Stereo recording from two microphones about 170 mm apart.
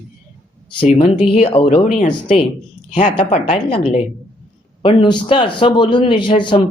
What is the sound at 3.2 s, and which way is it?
Speech, 40° left (ahead or behind).